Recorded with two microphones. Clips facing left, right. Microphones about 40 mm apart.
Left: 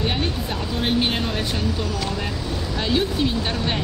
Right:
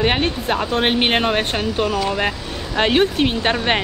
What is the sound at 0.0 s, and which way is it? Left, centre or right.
Speech, right.